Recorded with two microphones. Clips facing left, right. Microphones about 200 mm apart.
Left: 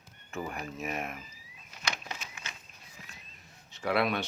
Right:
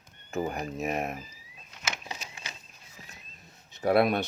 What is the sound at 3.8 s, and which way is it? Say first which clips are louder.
Speech: right 6 dB; 45° right (ahead or behind).